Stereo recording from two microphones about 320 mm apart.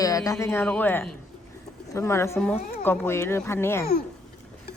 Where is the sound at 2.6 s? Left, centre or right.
Left.